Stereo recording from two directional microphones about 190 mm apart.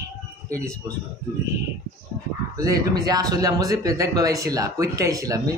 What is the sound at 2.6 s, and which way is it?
Speech, 20° right (ahead or behind).